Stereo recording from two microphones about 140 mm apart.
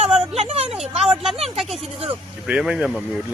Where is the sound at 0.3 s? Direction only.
45° right (ahead or behind).